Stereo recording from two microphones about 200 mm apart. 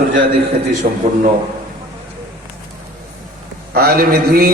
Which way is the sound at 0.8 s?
40° right (ahead or behind).